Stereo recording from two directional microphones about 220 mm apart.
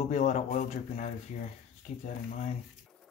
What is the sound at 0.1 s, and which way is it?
Speech, 35° left (ahead or behind).